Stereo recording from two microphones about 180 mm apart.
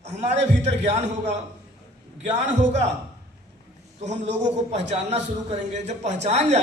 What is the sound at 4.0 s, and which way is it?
A man's voice, 40° right (ahead or behind).